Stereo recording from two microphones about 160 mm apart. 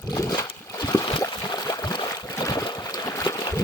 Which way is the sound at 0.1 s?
25° left (ahead or behind).